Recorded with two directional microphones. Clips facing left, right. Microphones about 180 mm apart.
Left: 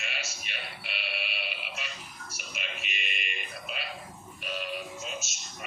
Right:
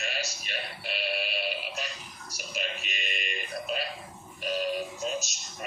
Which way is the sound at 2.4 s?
40° right (ahead or behind).